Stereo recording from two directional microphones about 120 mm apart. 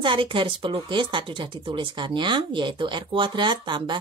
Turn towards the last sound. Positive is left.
turn(degrees=-40)  # may be behind; listen again after turning